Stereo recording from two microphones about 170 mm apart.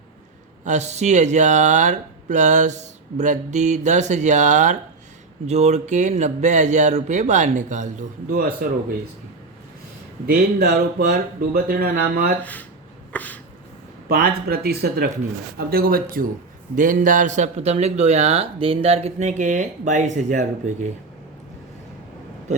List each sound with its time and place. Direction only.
0.6 s speech: 40° right (ahead or behind); by 8.5 s 60° right (ahead or behind)
10.2 s speech: 65° right (ahead or behind)
12.4 s speech: 10° left (ahead or behind)
13.1 s a sound: 10° left (ahead or behind)
14.1 s speech: 65° right (ahead or behind); by 20.9 s 45° right (ahead or behind)